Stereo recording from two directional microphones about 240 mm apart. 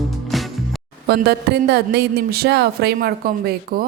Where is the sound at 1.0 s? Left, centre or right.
Right.